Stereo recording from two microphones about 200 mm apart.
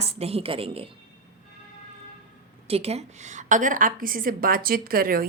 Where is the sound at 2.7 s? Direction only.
30° right (ahead or behind).